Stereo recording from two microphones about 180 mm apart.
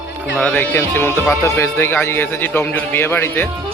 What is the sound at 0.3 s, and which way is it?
Speech, 5° left (ahead or behind).